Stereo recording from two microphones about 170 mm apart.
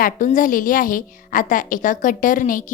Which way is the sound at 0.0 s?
50° left (ahead or behind).